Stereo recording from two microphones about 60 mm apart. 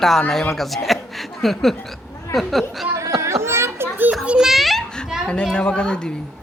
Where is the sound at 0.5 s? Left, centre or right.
Centre.